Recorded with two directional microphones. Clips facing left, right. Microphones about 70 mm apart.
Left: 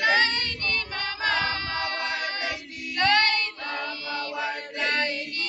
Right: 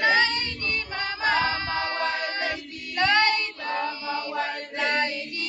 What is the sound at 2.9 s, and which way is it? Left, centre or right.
Child singing, centre.